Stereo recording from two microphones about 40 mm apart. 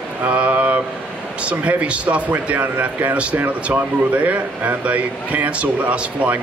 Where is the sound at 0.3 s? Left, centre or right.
Right.